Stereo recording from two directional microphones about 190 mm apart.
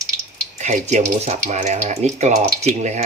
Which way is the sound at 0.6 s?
35° right (ahead or behind).